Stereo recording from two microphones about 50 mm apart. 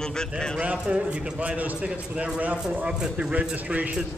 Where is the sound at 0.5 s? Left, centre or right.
Right.